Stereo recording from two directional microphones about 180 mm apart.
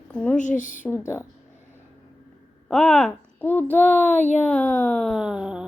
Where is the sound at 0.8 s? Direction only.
15° left (ahead or behind).